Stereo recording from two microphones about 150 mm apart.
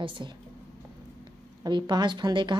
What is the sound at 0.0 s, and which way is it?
Speech, 35° right (ahead or behind).